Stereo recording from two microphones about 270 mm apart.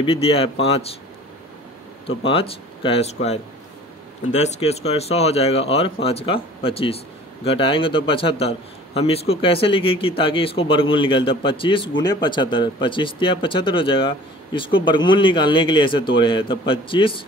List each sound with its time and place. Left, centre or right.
0.0 s a man's voice: left
2.0 s a man's voice: left